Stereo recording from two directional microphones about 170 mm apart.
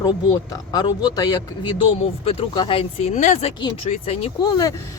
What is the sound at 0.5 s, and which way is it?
Speech, 25° left (ahead or behind).